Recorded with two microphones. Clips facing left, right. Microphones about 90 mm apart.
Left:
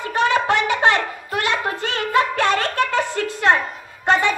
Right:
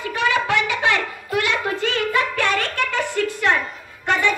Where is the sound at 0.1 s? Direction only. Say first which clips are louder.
Left 3 dB; 35° left (ahead or behind).